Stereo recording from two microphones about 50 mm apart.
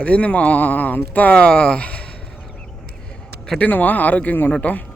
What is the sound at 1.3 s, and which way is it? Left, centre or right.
Speech, centre.